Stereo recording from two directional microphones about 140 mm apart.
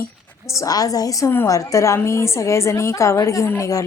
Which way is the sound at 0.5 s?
25° left (ahead or behind).